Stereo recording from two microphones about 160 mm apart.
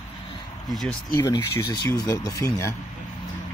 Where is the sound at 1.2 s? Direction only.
25° left (ahead or behind).